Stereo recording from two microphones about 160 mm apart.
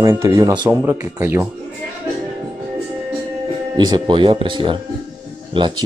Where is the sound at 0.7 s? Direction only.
15° right (ahead or behind).